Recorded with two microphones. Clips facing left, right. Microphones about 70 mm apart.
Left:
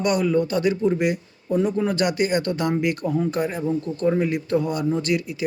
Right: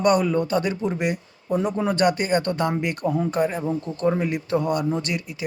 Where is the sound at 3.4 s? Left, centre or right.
Right.